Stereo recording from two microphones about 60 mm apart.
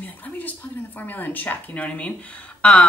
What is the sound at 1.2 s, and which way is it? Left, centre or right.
Speech, left.